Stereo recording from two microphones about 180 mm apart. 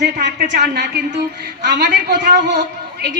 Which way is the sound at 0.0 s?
70° right (ahead or behind).